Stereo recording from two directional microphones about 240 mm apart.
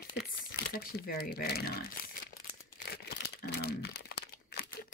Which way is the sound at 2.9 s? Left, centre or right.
Left.